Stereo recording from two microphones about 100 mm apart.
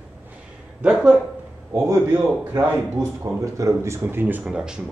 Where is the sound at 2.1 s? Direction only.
15° right (ahead or behind).